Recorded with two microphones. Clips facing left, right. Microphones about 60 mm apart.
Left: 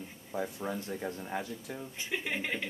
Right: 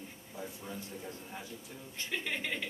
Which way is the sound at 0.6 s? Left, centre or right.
Left.